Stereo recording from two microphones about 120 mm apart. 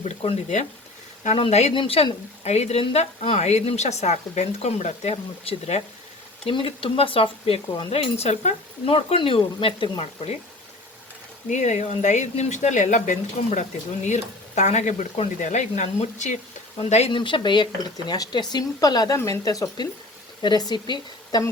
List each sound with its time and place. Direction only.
0.0 s a woman's voice: 55° left (ahead or behind)
1.7 s speech: 50° left (ahead or behind)
2.4 s a woman's voice: 65° left (ahead or behind)
6.4 s a woman's voice: 50° left (ahead or behind)
11.4 s speech: 80° left
17.1 s speech: 45° left (ahead or behind)